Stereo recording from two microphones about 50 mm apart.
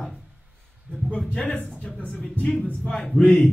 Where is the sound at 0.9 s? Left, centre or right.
Right.